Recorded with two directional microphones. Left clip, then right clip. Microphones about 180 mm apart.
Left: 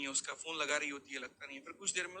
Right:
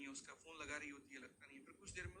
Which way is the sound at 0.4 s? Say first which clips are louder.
Left 13 dB; 30° left (ahead or behind).